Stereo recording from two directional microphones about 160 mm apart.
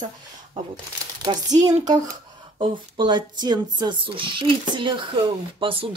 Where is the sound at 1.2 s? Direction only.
25° right (ahead or behind).